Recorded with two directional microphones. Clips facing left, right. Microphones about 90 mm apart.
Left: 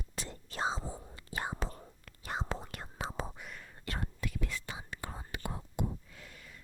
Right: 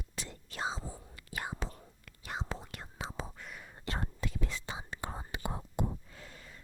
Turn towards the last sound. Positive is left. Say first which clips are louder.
# right 1 dB
turn(degrees=-30)  # may be behind; listen again after turning